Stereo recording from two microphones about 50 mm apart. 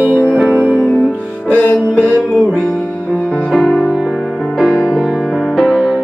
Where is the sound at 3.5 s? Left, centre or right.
Centre.